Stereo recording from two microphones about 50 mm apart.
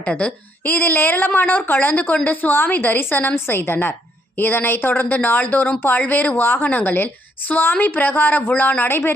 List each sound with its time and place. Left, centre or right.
0.1 s a woman's voice: left
0.6 s a woman's voice: left